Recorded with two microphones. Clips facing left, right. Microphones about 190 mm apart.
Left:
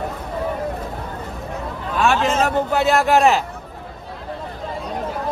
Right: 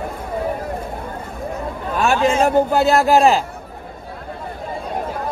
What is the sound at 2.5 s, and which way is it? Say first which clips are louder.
Speech: right 3 dB; 35° right (ahead or behind).